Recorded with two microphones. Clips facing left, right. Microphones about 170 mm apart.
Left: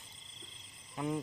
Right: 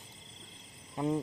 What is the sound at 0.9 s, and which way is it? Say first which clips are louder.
Speech: right 4 dB; 30° right (ahead or behind).